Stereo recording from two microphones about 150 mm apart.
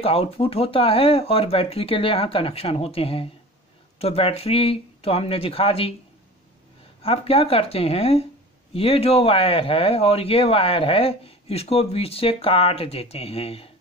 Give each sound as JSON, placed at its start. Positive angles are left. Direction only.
{"t": 0.0, "sound": "speech", "side_deg": 40}
{"t": 7.0, "sound": "speech", "side_deg": 40}